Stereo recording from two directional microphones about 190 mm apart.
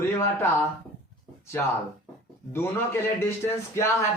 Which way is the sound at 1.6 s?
10° left (ahead or behind).